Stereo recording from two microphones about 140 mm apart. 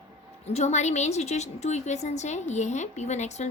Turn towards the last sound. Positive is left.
turn(degrees=55)  # may be behind; listen again after turning